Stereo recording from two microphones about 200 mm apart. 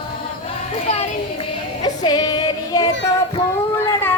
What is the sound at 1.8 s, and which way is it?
Music, 20° left (ahead or behind).